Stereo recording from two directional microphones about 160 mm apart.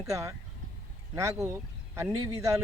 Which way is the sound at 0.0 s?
20° right (ahead or behind).